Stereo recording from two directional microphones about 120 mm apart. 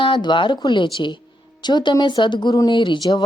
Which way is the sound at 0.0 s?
40° left (ahead or behind).